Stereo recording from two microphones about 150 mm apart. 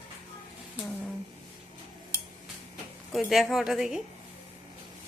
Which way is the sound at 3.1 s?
Centre (ahead or behind).